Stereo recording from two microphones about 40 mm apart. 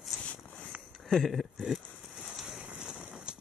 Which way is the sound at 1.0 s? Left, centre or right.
Centre.